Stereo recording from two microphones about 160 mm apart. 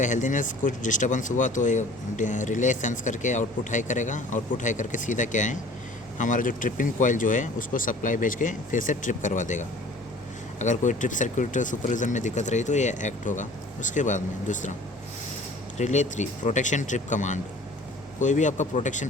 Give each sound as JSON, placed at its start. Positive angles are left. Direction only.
{"t": 0.0, "sound": "speech", "side_deg": 50}
{"t": 15.8, "sound": "speech", "side_deg": 50}